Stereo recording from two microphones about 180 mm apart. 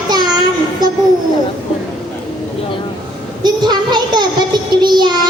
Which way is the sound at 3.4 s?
25° right (ahead or behind).